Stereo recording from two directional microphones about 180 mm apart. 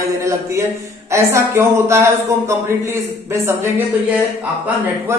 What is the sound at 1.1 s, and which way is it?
A man's voice, 15° right (ahead or behind).